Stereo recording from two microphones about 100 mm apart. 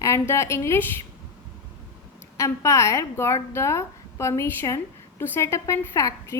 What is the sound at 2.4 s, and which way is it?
A woman's voice, 30° left (ahead or behind).